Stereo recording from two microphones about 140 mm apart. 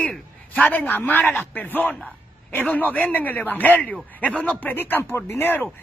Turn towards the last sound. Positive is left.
turn(degrees=15)  # may be behind; listen again after turning